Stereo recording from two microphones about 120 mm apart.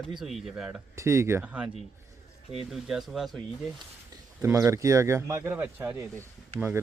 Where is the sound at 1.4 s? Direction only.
10° right (ahead or behind).